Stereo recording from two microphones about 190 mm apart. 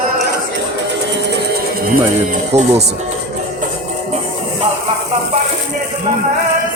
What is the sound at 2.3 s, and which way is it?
Speech, 35° right (ahead or behind).